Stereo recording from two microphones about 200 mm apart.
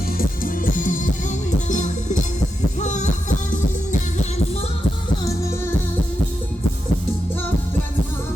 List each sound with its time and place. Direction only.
0.2 s music: 45° left (ahead or behind)